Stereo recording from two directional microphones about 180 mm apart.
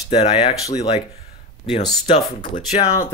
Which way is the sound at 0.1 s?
35° left (ahead or behind).